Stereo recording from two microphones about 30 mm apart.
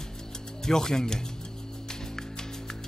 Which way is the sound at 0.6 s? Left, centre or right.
Centre.